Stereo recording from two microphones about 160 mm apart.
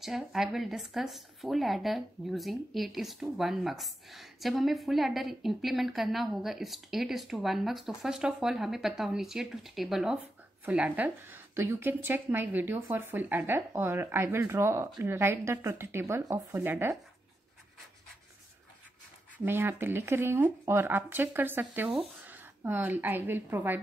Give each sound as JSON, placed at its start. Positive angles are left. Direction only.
{"t": 0.0, "sound": "a woman's voice", "side_deg": 0}
{"t": 19.4, "sound": "speech", "side_deg": -15}